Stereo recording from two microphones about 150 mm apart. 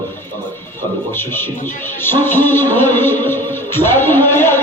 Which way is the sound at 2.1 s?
15° left (ahead or behind).